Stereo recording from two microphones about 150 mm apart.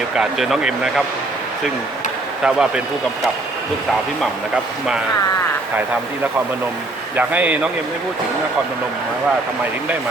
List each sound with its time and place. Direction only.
0.2 s speech: 5° right (ahead or behind)
2.4 s speech: 5° right (ahead or behind)
7.2 s speech: 10° right (ahead or behind)